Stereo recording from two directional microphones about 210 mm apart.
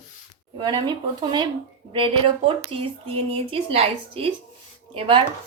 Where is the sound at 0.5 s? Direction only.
20° right (ahead or behind).